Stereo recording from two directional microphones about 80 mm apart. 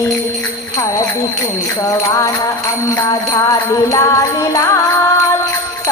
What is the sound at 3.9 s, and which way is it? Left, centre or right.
Music, left.